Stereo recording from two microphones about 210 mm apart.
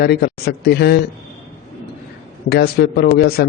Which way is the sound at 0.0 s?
50° left (ahead or behind).